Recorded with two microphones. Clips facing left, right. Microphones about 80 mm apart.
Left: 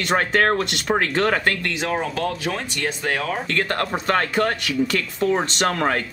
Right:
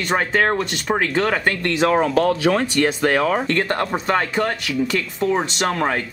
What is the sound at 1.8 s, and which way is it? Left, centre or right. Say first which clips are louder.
Speech: right 9 dB; right.